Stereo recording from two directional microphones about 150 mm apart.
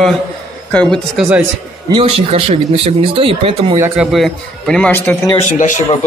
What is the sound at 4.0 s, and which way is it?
A man's voice, centre (ahead or behind).